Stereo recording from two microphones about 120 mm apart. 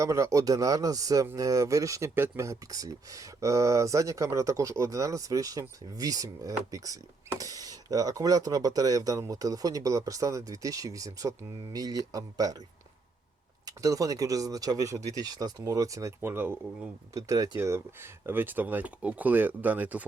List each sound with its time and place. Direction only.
0.0 s speech: 25° right (ahead or behind)
13.7 s speech: 30° right (ahead or behind); by 20.1 s 15° right (ahead or behind)